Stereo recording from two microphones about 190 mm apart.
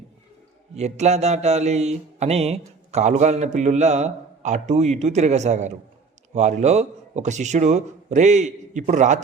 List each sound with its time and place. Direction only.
0.8 s mantra: 35° right (ahead or behind)